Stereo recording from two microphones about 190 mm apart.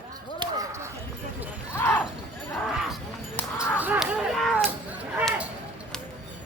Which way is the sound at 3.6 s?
10° right (ahead or behind).